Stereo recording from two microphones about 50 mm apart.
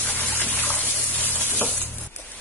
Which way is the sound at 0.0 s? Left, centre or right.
Left.